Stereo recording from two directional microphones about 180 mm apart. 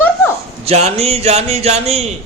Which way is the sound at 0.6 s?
35° right (ahead or behind).